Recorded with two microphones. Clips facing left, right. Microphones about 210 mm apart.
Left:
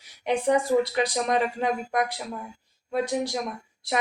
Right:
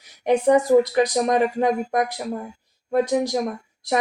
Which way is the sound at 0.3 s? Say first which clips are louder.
Right 6 dB; 45° right (ahead or behind).